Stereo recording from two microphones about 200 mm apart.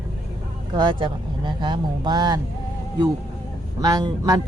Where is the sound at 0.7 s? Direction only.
20° right (ahead or behind).